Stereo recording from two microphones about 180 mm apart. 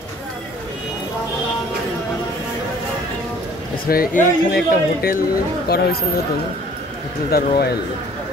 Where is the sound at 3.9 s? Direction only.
55° left (ahead or behind).